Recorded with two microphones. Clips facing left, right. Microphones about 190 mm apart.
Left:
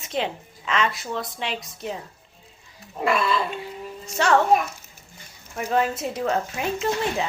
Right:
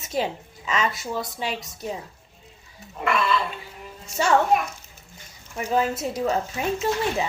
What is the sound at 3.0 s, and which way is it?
Speech, 35° left (ahead or behind).